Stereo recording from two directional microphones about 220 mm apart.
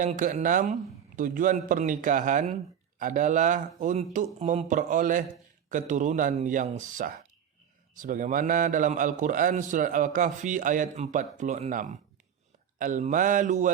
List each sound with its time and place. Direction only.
0.0 s a man's voice: 35° right (ahead or behind)